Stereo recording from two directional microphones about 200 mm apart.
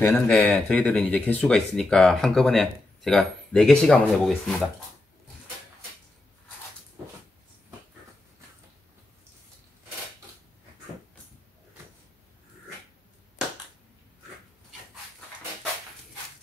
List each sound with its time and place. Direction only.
0.0 s speech: 5° left (ahead or behind)